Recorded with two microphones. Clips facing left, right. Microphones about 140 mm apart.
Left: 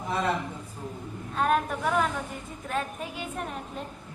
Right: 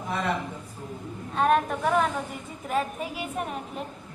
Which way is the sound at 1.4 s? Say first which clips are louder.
Right 3 dB; centre (ahead or behind).